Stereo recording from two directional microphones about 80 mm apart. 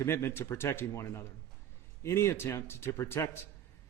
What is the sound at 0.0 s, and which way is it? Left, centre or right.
A man's voice, left.